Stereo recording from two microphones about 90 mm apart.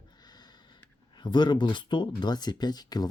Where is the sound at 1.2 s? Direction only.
55° left (ahead or behind).